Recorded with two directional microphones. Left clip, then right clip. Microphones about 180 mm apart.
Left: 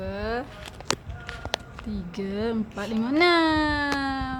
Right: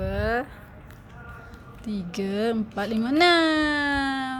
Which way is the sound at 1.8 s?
15° right (ahead or behind).